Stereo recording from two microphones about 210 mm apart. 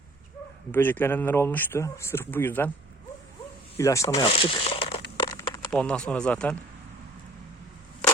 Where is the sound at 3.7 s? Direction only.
15° left (ahead or behind).